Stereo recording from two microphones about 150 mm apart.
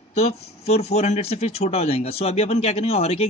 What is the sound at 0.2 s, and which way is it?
Speech, 45° left (ahead or behind).